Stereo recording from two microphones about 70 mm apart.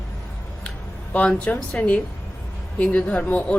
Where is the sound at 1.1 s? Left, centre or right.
Centre.